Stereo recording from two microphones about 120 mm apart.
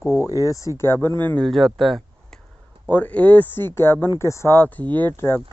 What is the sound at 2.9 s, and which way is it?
Speech, 15° left (ahead or behind).